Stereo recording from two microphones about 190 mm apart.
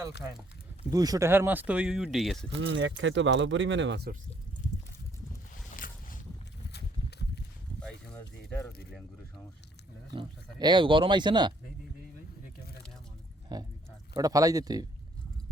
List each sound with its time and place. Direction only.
0.9 s speech: 20° right (ahead or behind); by 2.5 s centre (ahead or behind)
2.5 s speech: 70° right (ahead or behind)
5.7 s boat: 45° left (ahead or behind)
6.7 s horse: 60° left (ahead or behind)
7.8 s a sound: 5° left (ahead or behind)
10.2 s speech: 25° right (ahead or behind)
13.5 s speech: 20° right (ahead or behind)